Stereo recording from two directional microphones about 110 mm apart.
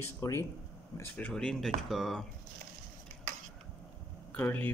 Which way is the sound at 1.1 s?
10° left (ahead or behind).